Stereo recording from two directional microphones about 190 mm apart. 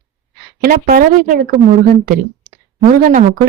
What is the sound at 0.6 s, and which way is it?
Speech, 50° right (ahead or behind).